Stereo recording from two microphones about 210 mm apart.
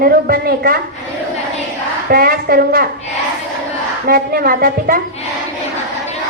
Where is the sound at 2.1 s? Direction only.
45° right (ahead or behind).